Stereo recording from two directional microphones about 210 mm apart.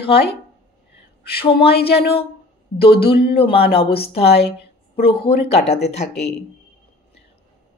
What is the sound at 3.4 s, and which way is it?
A woman's voice, 25° left (ahead or behind).